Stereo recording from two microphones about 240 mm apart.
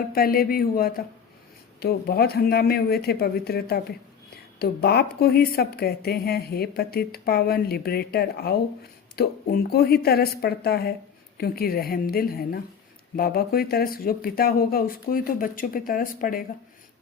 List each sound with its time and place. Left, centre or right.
0.1 s speech: left